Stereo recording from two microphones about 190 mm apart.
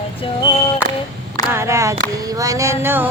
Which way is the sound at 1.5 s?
15° right (ahead or behind).